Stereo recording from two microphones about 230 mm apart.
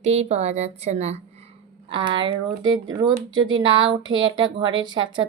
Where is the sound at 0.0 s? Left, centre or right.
Right.